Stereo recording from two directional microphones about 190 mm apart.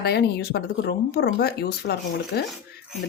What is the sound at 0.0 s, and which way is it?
A woman's voice, 55° left (ahead or behind).